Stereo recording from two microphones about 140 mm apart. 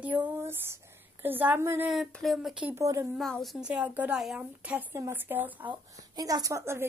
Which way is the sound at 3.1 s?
Centre (ahead or behind).